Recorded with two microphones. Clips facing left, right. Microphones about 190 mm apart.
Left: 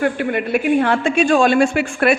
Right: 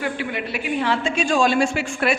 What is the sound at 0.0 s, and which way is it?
A woman's voice, 50° left (ahead or behind).